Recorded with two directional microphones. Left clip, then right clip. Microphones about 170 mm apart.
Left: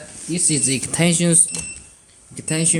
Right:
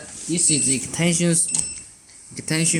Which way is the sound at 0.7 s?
40° left (ahead or behind).